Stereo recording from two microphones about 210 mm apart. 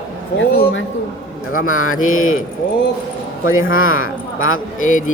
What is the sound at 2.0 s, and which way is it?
Speech, 75° left (ahead or behind).